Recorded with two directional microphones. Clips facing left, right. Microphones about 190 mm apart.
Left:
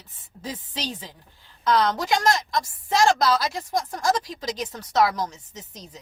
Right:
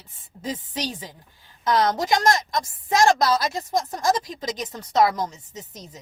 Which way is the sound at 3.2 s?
50° right (ahead or behind).